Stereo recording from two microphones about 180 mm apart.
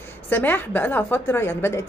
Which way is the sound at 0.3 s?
10° left (ahead or behind).